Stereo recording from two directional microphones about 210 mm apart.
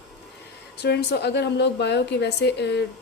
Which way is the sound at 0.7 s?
50° left (ahead or behind).